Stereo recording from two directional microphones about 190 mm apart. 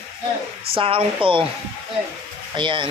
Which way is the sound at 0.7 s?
30° right (ahead or behind).